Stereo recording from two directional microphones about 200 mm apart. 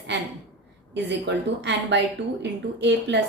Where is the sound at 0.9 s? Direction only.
60° right (ahead or behind).